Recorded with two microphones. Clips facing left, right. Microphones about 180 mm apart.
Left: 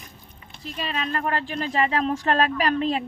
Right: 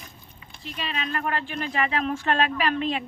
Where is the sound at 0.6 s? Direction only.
40° left (ahead or behind).